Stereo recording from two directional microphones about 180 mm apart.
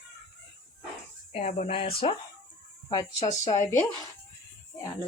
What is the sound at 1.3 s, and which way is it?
Speech, 40° left (ahead or behind).